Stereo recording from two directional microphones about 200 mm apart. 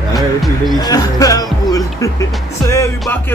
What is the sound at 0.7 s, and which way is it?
Music, 20° left (ahead or behind).